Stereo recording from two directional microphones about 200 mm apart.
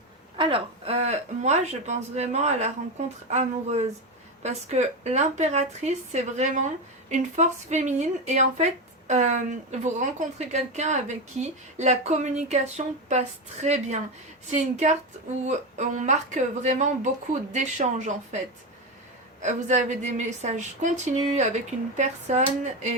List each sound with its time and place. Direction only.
0.3 s speech: 25° right (ahead or behind)
19.4 s speech: 35° right (ahead or behind)